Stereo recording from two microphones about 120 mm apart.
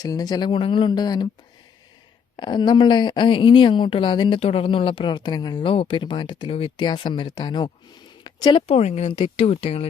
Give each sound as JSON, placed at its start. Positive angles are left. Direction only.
{"t": 0.0, "sound": "a woman's voice", "side_deg": 35}
{"t": 2.3, "sound": "a woman's voice", "side_deg": 40}
{"t": 4.4, "sound": "speech", "side_deg": 55}
{"t": 5.7, "sound": "speech", "side_deg": 50}
{"t": 8.2, "sound": "a sound", "side_deg": 35}
{"t": 8.6, "sound": "speech", "side_deg": 60}
{"t": 9.1, "sound": "speech", "side_deg": 45}